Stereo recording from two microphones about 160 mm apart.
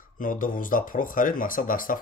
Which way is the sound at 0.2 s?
60° left (ahead or behind).